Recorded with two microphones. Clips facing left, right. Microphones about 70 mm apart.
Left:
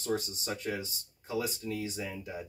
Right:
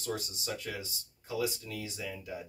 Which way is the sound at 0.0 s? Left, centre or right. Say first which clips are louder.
Left 4 dB; left.